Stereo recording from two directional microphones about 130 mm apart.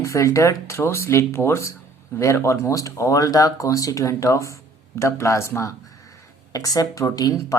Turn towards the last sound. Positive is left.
turn(degrees=25)  # may be behind; listen again after turning